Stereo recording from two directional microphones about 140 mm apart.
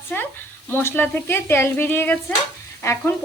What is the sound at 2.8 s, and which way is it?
Frying, 20° left (ahead or behind).